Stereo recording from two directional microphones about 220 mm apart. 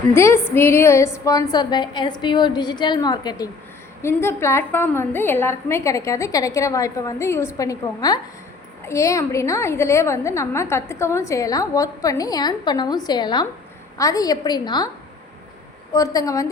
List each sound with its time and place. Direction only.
0.1 s a woman's voice: 10° left (ahead or behind)
15.9 s a woman's voice: 15° left (ahead or behind)